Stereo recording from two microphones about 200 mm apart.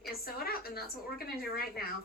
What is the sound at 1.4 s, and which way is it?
Speech, 50° left (ahead or behind).